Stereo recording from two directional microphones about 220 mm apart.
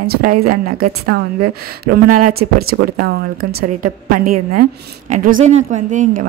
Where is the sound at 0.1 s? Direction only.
45° right (ahead or behind).